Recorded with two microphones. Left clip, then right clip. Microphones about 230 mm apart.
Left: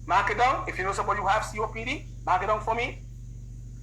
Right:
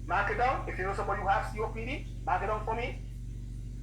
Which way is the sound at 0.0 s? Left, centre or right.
Left.